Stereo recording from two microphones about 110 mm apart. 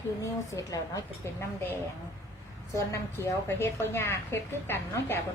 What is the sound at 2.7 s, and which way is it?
A woman's voice, 25° left (ahead or behind).